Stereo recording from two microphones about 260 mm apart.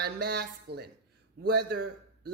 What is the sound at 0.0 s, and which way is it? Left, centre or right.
Speech, right.